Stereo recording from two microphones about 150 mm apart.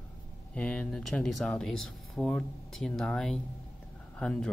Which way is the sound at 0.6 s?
5° left (ahead or behind).